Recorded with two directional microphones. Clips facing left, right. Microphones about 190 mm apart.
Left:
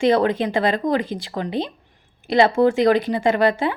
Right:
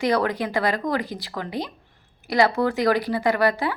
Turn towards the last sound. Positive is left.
turn(degrees=25)  # may be behind; listen again after turning